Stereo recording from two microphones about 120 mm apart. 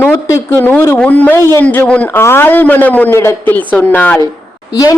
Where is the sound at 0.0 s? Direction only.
15° left (ahead or behind).